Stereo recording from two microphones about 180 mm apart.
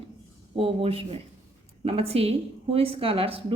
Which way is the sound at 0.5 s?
30° right (ahead or behind).